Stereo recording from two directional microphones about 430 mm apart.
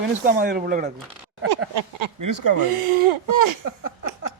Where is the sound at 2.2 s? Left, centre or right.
Right.